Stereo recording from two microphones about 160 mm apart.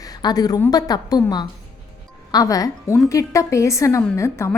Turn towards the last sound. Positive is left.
turn(degrees=20)  # may be behind; listen again after turning